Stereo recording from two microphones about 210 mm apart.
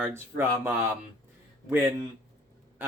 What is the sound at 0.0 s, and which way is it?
Speech, 10° right (ahead or behind).